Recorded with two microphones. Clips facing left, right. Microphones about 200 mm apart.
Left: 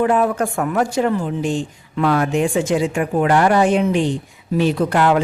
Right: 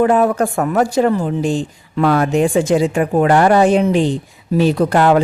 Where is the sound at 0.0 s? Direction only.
40° right (ahead or behind).